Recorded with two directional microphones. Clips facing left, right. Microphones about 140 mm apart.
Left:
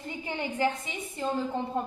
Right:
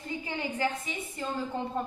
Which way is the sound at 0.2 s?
25° left (ahead or behind).